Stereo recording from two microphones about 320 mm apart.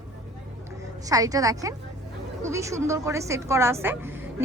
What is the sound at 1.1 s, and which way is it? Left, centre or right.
A woman's voice, centre.